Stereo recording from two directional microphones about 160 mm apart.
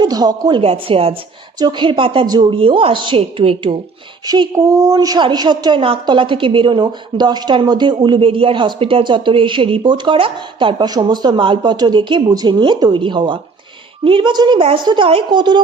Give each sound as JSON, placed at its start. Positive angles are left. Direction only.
{"t": 0.0, "sound": "speech", "side_deg": -25}
{"t": 0.6, "sound": "a woman's voice", "side_deg": -40}
{"t": 4.3, "sound": "a woman's voice", "side_deg": -25}